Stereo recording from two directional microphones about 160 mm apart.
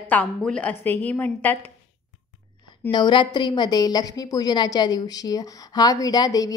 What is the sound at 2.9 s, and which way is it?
A woman's voice, 30° left (ahead or behind).